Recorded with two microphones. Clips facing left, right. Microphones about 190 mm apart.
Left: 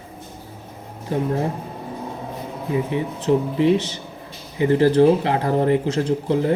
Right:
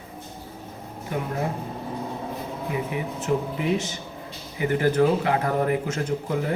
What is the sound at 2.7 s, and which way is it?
Speech, 30° left (ahead or behind).